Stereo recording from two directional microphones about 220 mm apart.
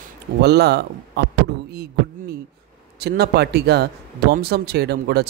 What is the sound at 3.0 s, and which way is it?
Speech, 45° right (ahead or behind).